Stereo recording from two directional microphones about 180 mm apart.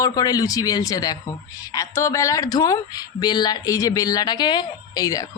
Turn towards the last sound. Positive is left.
turn(degrees=20)  # may be behind; listen again after turning